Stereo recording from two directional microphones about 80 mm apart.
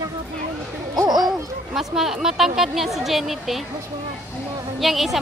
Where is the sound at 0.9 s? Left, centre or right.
Right.